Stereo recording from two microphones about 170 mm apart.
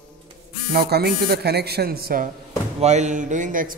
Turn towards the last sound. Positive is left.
turn(degrees=-50)  # may be behind; listen again after turning